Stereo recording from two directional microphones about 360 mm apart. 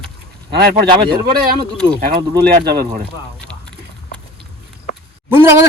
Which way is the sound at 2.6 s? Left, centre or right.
Right.